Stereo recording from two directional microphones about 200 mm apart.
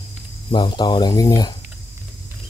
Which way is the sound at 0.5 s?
20° left (ahead or behind).